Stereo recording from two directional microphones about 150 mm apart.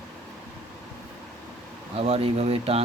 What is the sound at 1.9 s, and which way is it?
Speech, 40° right (ahead or behind).